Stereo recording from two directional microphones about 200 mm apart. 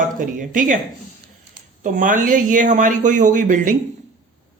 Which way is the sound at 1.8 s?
40° right (ahead or behind).